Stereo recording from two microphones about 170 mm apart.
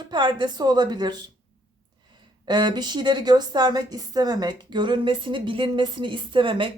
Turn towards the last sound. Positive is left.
turn(degrees=-30)  # may be behind; listen again after turning